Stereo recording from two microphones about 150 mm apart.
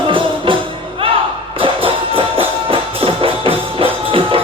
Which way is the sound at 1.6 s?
35° right (ahead or behind).